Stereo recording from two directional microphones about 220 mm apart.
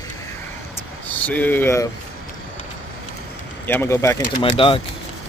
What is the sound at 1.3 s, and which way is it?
Speech, 10° left (ahead or behind).